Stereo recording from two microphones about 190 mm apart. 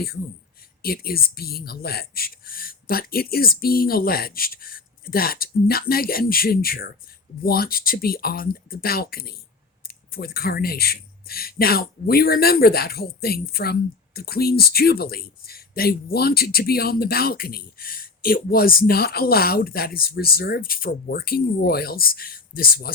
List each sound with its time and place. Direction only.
0.8 s speech: 55° left (ahead or behind)